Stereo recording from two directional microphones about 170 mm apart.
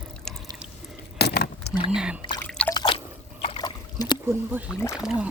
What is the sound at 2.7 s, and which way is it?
Drip, 30° left (ahead or behind).